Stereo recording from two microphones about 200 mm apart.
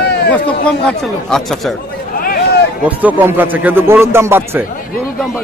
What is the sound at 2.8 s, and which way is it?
A man's voice, 10° right (ahead or behind).